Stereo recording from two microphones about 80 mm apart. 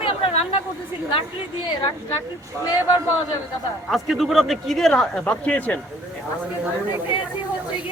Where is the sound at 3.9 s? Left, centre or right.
Centre.